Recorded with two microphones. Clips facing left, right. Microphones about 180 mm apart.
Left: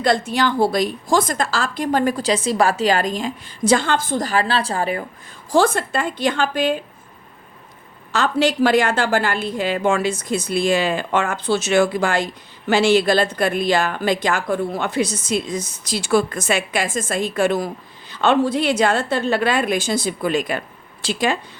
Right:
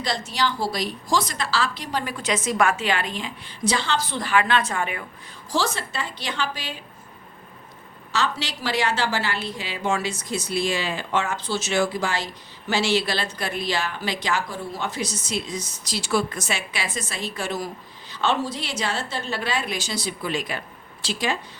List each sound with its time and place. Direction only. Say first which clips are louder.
0.0 s a woman's voice: left 7 dB; 55° left (ahead or behind); by 5.0 s 35° left (ahead or behind)
5.5 s a woman's voice: left 9 dB; 55° left (ahead or behind)
8.1 s a woman's voice: left 8 dB; 50° left (ahead or behind)